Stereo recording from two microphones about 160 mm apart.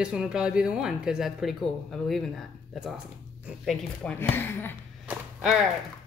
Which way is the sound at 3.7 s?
10° left (ahead or behind).